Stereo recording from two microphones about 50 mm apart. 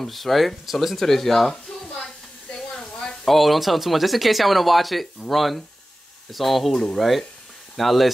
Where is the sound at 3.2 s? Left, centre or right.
Centre.